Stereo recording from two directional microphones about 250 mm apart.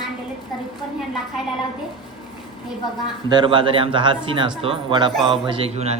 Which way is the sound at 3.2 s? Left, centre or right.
Centre.